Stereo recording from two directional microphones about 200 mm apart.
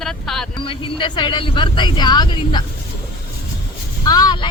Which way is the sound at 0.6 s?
25° left (ahead or behind).